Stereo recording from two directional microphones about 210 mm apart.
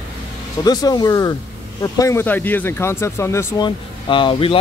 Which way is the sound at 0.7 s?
20° left (ahead or behind).